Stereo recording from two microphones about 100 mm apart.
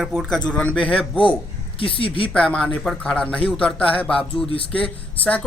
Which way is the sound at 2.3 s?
10° left (ahead or behind).